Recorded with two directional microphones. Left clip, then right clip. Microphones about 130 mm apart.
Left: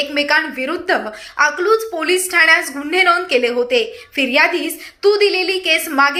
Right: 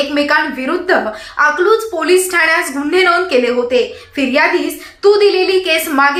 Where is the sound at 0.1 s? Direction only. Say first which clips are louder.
Right 3 dB; 15° left (ahead or behind).